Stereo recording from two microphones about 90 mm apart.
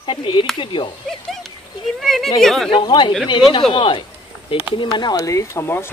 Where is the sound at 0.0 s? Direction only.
65° left (ahead or behind).